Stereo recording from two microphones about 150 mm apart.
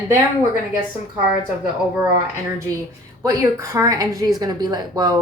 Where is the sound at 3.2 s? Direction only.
20° right (ahead or behind).